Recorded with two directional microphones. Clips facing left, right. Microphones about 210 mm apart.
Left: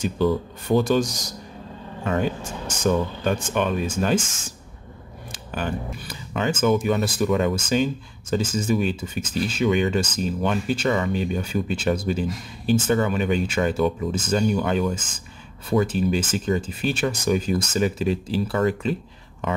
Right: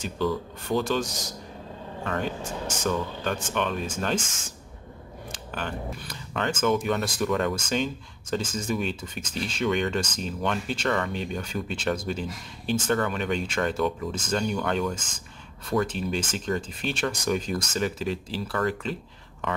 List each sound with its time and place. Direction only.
0.0 s speech: 15° left (ahead or behind)
5.3 s speech: 10° left (ahead or behind)